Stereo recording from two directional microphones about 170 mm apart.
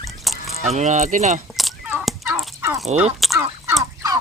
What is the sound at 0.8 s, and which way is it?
Speech, 45° right (ahead or behind).